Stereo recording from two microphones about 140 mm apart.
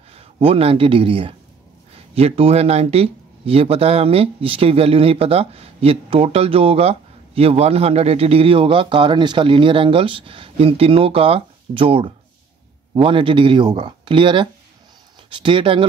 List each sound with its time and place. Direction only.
0.1 s a man's voice: 45° right (ahead or behind)